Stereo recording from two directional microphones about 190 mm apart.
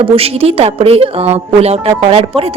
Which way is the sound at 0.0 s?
30° right (ahead or behind).